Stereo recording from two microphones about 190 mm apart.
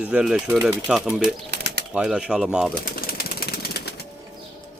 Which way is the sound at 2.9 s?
50° left (ahead or behind).